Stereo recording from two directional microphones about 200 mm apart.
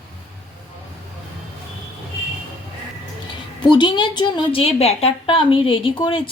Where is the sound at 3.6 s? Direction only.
25° left (ahead or behind).